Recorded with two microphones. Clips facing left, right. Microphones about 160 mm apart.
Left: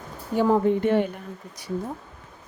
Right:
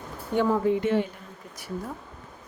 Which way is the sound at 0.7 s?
50° left (ahead or behind).